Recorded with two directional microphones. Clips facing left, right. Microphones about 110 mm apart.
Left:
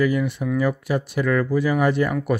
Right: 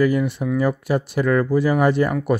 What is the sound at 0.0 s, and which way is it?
Speech, 35° right (ahead or behind).